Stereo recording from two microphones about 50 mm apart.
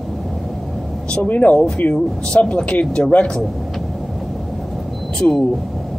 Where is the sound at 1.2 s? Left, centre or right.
Left.